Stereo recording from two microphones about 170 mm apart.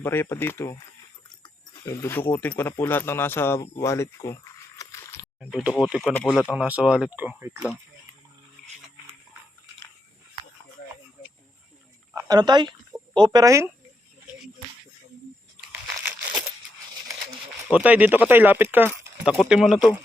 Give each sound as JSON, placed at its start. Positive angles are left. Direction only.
{"t": 0.0, "sound": "speech", "side_deg": 15}
{"t": 1.4, "sound": "a sound", "side_deg": 15}
{"t": 2.3, "sound": "speech", "side_deg": 10}
{"t": 4.8, "sound": "a sound", "side_deg": 15}
{"t": 5.4, "sound": "speech", "side_deg": 0}
{"t": 6.5, "sound": "speech", "side_deg": -10}
{"t": 12.1, "sound": "speech", "side_deg": -25}
{"t": 16.0, "sound": "a sound", "side_deg": -20}
{"t": 17.7, "sound": "speech", "side_deg": -5}